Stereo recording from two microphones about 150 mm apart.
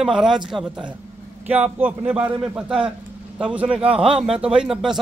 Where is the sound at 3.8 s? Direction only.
40° right (ahead or behind).